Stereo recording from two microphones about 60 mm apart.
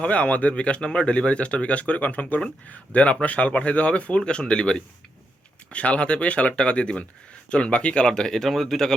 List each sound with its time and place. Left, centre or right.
0.0 s speech: left; by 9.0 s centre